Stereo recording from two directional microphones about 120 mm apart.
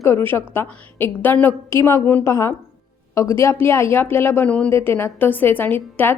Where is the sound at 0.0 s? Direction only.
20° left (ahead or behind).